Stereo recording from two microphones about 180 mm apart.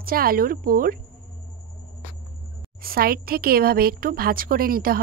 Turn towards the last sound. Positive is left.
turn(degrees=-55)  # may be behind; listen again after turning